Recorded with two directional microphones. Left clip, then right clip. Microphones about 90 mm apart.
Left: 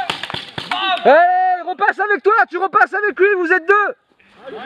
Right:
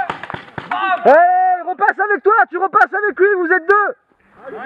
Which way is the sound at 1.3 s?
10° left (ahead or behind).